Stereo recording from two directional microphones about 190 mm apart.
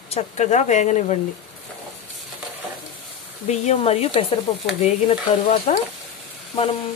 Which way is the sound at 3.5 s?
35° left (ahead or behind).